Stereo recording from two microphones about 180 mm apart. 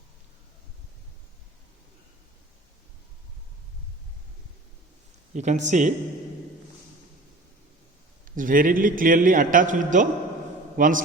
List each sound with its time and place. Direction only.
5.3 s a man's voice: 45° right (ahead or behind)
8.2 s a man's voice: 45° right (ahead or behind)